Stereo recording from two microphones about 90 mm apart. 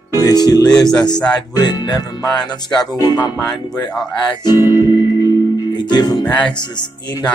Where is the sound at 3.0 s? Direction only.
50° left (ahead or behind).